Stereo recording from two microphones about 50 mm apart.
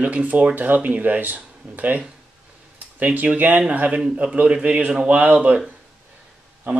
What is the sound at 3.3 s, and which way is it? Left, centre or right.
Speech, right.